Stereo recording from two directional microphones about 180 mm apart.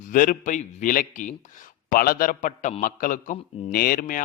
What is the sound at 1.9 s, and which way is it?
A man's voice, 55° left (ahead or behind).